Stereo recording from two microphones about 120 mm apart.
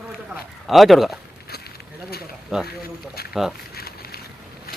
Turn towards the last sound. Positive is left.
turn(degrees=-5)  # may be behind; listen again after turning